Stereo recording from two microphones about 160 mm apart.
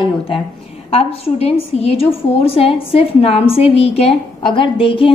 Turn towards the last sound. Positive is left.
turn(degrees=35)  # may be behind; listen again after turning